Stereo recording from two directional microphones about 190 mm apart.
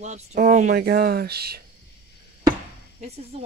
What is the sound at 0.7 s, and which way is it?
Speech, 55° right (ahead or behind).